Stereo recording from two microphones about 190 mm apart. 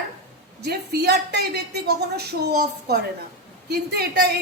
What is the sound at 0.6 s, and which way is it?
Speech, 55° right (ahead or behind).